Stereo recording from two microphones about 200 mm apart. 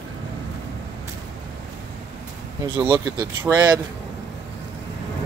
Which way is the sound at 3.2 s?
20° right (ahead or behind).